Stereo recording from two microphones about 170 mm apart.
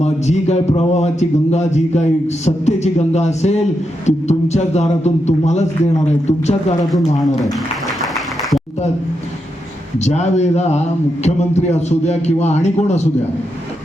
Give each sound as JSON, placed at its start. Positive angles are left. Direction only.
{"t": 0.0, "sound": "a man's voice", "side_deg": 40}
{"t": 8.0, "sound": "music", "side_deg": 0}
{"t": 10.0, "sound": "a man's voice", "side_deg": 40}